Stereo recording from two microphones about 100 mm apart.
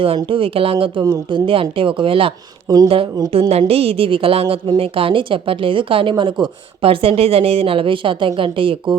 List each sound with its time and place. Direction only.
0.3 s speech: 65° right (ahead or behind)
1.0 s speech: 50° right (ahead or behind)
2.6 s speech: 40° right (ahead or behind)
3.3 s a woman's voice: 70° right (ahead or behind)